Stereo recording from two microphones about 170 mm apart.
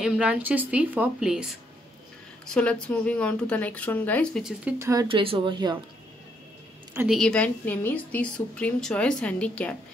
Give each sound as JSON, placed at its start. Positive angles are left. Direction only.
{"t": 0.0, "sound": "a woman's voice", "side_deg": -5}
{"t": 4.7, "sound": "a woman's voice", "side_deg": -15}
{"t": 5.0, "sound": "speech", "side_deg": -30}
{"t": 7.1, "sound": "a woman's voice", "side_deg": 5}